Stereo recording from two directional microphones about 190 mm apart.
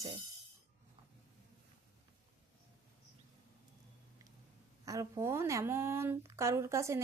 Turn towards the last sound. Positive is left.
turn(degrees=-15)  # may be behind; listen again after turning